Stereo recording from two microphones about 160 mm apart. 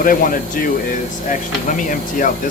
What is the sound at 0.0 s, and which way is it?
Speech, 60° left (ahead or behind).